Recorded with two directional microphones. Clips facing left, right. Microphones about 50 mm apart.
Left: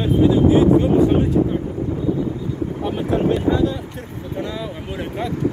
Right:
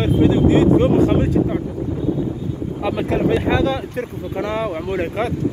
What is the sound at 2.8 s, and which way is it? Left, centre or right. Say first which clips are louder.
Speech: right 2 dB; right.